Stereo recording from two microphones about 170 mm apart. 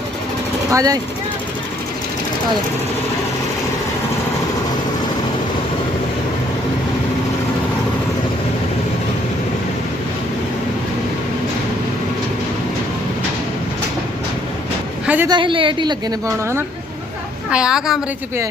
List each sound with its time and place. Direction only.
0.7 s a woman's voice: 20° right (ahead or behind)
15.0 s a sound: 10° right (ahead or behind)
15.3 s a woman's voice: 30° right (ahead or behind)
17.5 s a woman's voice: 5° right (ahead or behind)